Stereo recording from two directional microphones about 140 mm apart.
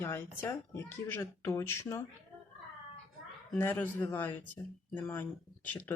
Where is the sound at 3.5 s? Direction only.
15° left (ahead or behind).